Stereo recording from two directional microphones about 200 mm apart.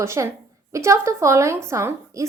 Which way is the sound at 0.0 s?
15° right (ahead or behind).